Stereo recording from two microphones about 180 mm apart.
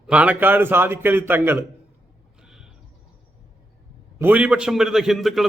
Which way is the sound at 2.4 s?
5° right (ahead or behind).